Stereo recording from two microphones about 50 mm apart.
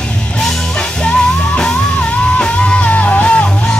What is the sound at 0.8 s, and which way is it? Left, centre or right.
Music, left.